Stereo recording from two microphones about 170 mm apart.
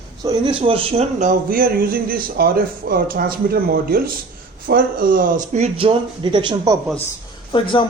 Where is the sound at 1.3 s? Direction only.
55° right (ahead or behind); by 6.7 s 25° right (ahead or behind).